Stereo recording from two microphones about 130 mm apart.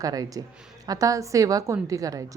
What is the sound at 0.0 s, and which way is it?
A woman's voice, 30° right (ahead or behind).